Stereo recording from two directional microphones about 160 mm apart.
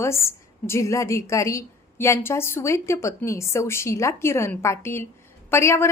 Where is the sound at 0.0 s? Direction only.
15° left (ahead or behind).